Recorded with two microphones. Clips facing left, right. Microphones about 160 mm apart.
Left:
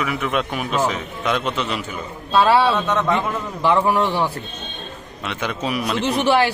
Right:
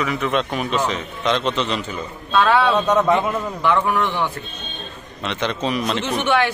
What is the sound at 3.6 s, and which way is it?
Speech, 30° left (ahead or behind).